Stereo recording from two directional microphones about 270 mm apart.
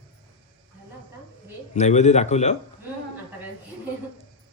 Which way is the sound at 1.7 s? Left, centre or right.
Left.